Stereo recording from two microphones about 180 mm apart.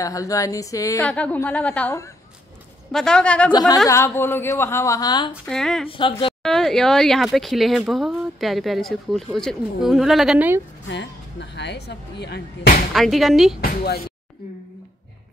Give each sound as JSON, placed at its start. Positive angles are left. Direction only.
{"t": 0.0, "sound": "a sound", "side_deg": 20}
{"t": 1.0, "sound": "a woman's voice", "side_deg": 5}
{"t": 3.5, "sound": "a woman's voice", "side_deg": 20}
{"t": 5.3, "sound": "speech", "side_deg": 0}
{"t": 5.9, "sound": "a sound", "side_deg": 30}
{"t": 6.4, "sound": "speech", "side_deg": 0}
{"t": 10.9, "sound": "speech", "side_deg": 75}
{"t": 12.9, "sound": "speech", "side_deg": 0}
{"t": 13.6, "sound": "speech", "side_deg": 55}